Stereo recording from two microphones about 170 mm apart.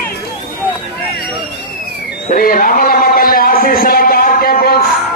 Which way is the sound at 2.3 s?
55° left (ahead or behind).